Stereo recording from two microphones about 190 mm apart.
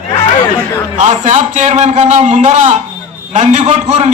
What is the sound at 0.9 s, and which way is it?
Speech, 40° right (ahead or behind).